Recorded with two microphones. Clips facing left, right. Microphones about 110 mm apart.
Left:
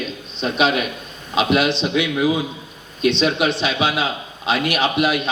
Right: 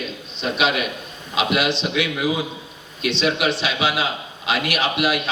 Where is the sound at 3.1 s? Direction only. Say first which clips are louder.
Left 2 dB; 30° left (ahead or behind).